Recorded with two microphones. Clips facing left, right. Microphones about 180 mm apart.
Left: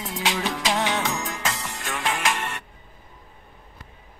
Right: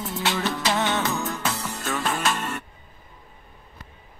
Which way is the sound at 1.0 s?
90° left.